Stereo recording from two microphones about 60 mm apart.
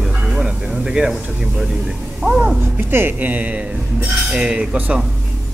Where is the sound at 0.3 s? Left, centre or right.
Centre.